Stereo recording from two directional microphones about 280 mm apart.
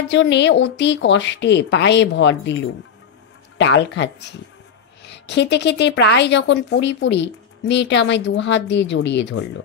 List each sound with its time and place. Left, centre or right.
0.1 s a woman's voice: left